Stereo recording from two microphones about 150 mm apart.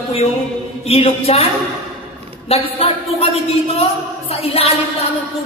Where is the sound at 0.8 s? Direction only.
40° left (ahead or behind).